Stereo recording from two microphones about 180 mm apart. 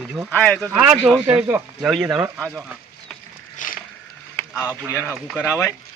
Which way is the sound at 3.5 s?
45° left (ahead or behind).